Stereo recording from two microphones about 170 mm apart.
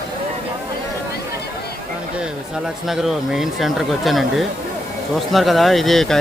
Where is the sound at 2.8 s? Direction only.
Centre (ahead or behind).